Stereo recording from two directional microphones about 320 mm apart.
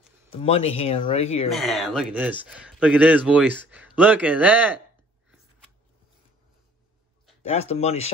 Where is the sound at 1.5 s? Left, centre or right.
Centre.